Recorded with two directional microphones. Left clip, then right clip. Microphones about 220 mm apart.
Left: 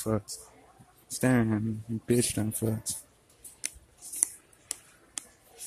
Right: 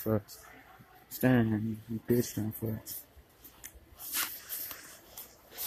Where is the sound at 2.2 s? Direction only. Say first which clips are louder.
Left 4 dB; 25° left (ahead or behind).